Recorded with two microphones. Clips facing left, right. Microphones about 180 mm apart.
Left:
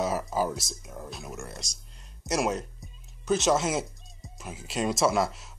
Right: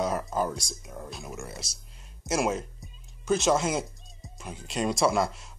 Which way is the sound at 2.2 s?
Centre (ahead or behind).